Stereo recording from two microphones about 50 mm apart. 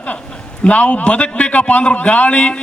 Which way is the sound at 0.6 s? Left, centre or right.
Left.